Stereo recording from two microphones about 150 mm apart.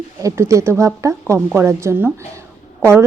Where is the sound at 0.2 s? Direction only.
20° right (ahead or behind).